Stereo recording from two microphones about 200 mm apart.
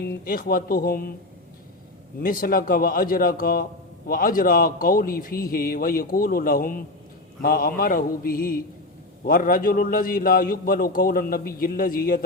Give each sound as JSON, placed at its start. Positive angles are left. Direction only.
{"t": 0.3, "sound": "a man's voice", "side_deg": 45}
{"t": 2.2, "sound": "a man's voice", "side_deg": 45}